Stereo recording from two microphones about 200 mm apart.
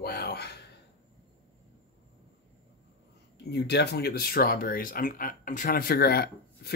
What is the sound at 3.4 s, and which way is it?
Speech, 55° left (ahead or behind).